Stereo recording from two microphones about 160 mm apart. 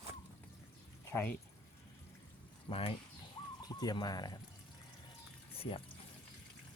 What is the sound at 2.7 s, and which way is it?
Speech, 35° left (ahead or behind).